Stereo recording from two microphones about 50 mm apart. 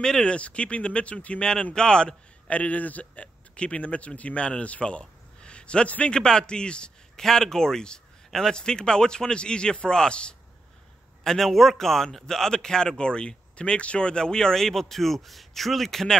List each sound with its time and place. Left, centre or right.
0.0 s speech: centre
2.5 s a man's voice: left
11.2 s a man's voice: centre